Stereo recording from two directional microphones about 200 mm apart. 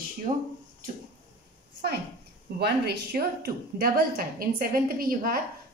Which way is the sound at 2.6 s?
55° right (ahead or behind).